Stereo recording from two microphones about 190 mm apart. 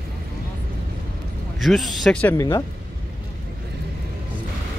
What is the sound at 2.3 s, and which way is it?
Speech, 15° left (ahead or behind).